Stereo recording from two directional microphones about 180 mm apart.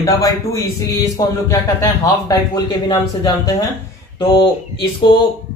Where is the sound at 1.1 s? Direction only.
20° left (ahead or behind).